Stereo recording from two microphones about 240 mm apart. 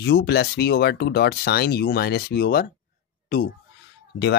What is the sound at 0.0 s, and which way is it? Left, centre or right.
Speech, left.